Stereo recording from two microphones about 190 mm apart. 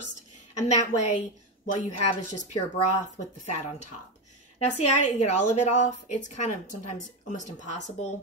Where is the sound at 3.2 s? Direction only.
40° left (ahead or behind).